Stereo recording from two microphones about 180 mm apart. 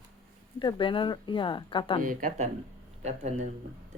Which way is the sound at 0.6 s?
25° left (ahead or behind).